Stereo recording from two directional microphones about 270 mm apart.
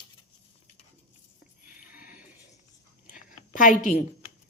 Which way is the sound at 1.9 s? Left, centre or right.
Left.